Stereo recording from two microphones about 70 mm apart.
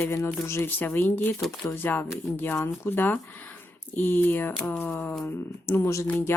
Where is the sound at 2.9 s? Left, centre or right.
Left.